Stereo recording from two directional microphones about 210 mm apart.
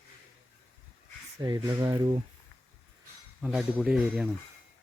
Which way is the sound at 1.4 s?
15° right (ahead or behind).